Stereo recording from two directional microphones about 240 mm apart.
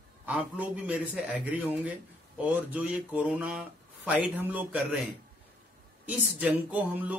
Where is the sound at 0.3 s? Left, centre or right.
Centre.